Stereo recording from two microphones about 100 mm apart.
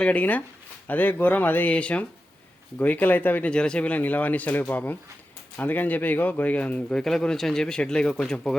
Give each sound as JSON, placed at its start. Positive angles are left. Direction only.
{"t": 0.0, "sound": "a man's voice", "side_deg": 15}